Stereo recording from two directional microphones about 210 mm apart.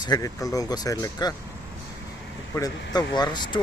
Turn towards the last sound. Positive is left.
turn(degrees=20)  # may be behind; listen again after turning